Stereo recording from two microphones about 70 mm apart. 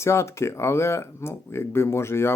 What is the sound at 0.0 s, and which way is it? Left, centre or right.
Speech, left.